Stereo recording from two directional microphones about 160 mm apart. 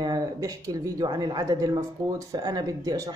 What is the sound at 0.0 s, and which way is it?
Speech, 25° right (ahead or behind).